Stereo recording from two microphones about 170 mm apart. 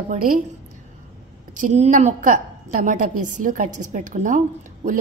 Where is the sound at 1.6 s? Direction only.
45° right (ahead or behind).